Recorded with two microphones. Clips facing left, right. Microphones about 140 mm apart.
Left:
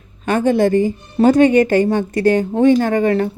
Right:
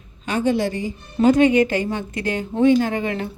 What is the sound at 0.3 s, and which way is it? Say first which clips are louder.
A woman's voice: left 6 dB; 50° left (ahead or behind).